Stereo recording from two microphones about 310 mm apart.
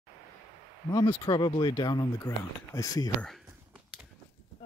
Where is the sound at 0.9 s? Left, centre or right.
Centre.